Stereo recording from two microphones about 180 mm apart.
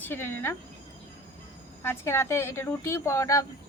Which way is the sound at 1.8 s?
15° left (ahead or behind).